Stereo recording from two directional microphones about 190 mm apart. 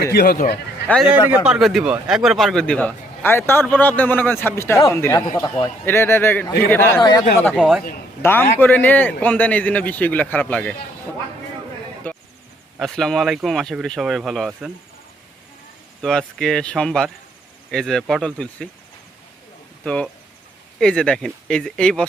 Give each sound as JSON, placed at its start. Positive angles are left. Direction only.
{"t": 0.0, "sound": "speech", "side_deg": 55}
{"t": 0.9, "sound": "a man's voice", "side_deg": 10}
{"t": 7.5, "sound": "speech", "side_deg": 0}
{"t": 8.2, "sound": "a man's voice", "side_deg": 10}
{"t": 12.1, "sound": "a sound", "side_deg": 10}
{"t": 12.8, "sound": "speech", "side_deg": 0}
{"t": 16.0, "sound": "speech", "side_deg": 5}
{"t": 19.8, "sound": "speech", "side_deg": 5}